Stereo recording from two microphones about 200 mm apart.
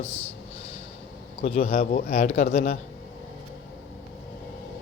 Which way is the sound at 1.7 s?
45° left (ahead or behind).